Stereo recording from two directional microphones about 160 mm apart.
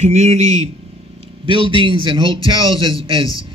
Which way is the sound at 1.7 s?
30° right (ahead or behind).